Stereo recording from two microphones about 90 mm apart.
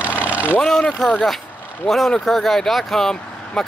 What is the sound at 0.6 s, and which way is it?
Speech, 10° left (ahead or behind).